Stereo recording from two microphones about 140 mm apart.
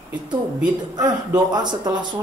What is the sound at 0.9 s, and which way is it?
A man's voice, 30° right (ahead or behind).